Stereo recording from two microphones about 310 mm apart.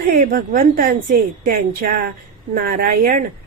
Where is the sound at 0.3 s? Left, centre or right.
Right.